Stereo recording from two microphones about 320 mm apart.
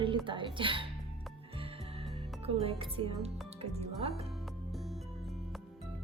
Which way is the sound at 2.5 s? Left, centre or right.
Centre.